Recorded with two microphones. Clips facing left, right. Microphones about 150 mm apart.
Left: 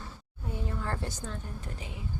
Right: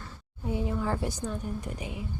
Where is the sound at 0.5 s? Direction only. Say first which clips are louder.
Right 6 dB; 10° right (ahead or behind).